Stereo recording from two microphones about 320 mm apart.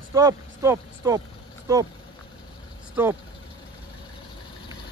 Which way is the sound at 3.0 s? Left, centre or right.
Centre.